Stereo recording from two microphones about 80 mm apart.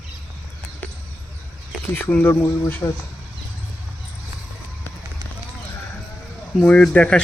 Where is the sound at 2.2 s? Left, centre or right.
Left.